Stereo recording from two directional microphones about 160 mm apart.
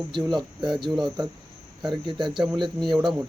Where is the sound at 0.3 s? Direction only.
30° right (ahead or behind).